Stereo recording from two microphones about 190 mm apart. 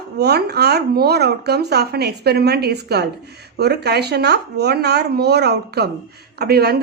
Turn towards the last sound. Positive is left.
turn(degrees=-55)  # may be behind; listen again after turning